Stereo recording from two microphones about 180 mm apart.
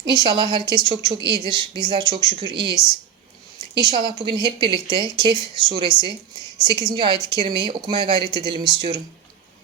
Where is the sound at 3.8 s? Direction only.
25° right (ahead or behind).